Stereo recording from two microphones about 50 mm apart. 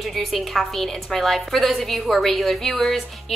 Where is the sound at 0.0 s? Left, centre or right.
Centre.